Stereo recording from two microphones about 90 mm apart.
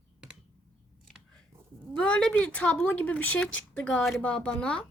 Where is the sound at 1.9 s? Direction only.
10° left (ahead or behind).